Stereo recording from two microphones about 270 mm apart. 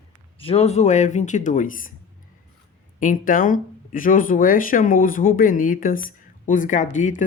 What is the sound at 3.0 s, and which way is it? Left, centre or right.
A woman's voice, left.